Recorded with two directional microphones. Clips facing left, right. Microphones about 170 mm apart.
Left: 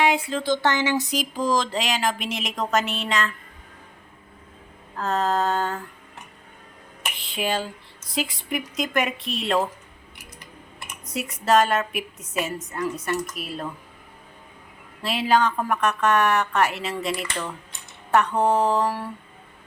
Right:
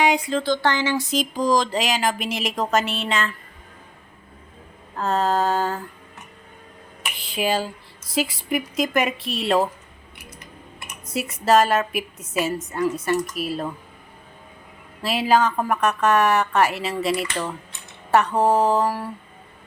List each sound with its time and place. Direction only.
0.0 s a sound: 5° left (ahead or behind)
0.4 s speech: 20° left (ahead or behind)
1.2 s a woman's voice: 5° left (ahead or behind)
4.9 s a woman's voice: centre (ahead or behind)
7.2 s a woman's voice: centre (ahead or behind)
11.0 s a woman's voice: centre (ahead or behind)
15.0 s a woman's voice: 5° right (ahead or behind)
18.5 s mantra: 35° right (ahead or behind)
18.8 s a woman's voice: 5° right (ahead or behind)